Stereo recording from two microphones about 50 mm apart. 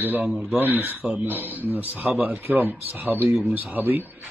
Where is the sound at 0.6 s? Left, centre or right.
Right.